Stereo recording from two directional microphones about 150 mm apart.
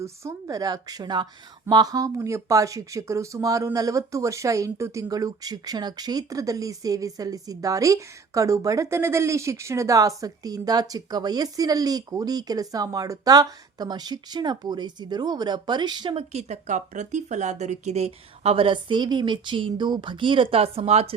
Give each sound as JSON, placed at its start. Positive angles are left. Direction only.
{"t": 0.0, "sound": "speech", "side_deg": -20}